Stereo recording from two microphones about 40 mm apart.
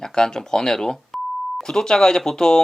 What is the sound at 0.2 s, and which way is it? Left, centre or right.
Speech, centre.